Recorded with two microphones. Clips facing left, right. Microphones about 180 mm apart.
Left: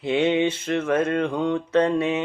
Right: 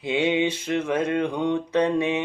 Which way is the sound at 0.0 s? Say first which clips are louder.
Left 2 dB; 10° right (ahead or behind).